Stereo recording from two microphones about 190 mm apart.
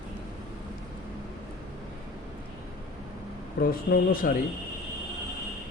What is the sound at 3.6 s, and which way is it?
Speech, 50° left (ahead or behind).